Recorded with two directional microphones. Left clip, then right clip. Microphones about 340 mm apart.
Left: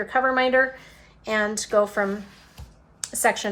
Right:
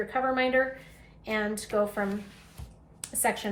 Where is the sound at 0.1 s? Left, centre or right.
Left.